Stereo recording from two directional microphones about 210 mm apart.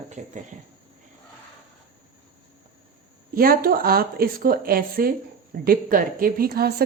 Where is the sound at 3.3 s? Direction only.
45° right (ahead or behind).